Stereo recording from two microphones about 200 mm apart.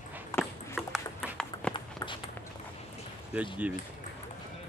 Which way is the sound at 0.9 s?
5° left (ahead or behind).